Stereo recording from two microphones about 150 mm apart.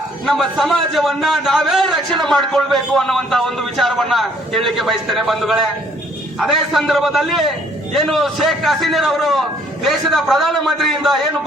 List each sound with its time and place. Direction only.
0.3 s a man's voice: centre (ahead or behind)